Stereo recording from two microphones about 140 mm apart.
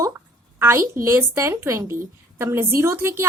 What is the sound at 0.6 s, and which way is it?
A woman's voice, 20° right (ahead or behind).